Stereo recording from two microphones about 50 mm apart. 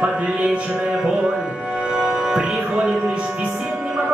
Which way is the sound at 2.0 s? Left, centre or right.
Centre.